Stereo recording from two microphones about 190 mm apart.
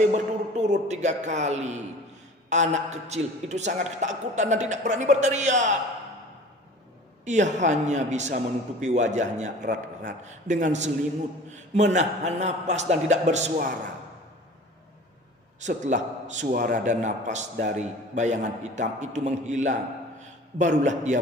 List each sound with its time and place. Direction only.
0.1 s a man's voice: 40° right (ahead or behind)
7.2 s a man's voice: 40° right (ahead or behind)
15.6 s a man's voice: 40° right (ahead or behind)